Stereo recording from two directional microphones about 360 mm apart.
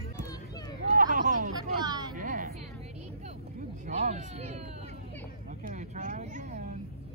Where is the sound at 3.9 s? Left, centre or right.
Centre.